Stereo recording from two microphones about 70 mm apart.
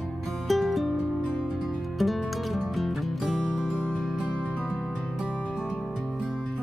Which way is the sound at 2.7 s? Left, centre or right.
Centre.